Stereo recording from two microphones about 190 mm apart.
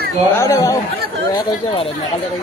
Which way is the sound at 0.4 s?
15° left (ahead or behind).